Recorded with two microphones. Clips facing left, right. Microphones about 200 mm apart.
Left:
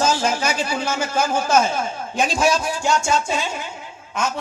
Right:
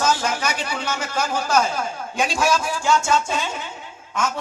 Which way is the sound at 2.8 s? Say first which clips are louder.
Even; 15° left (ahead or behind).